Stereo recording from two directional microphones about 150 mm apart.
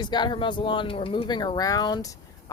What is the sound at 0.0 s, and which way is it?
Speech, 30° left (ahead or behind).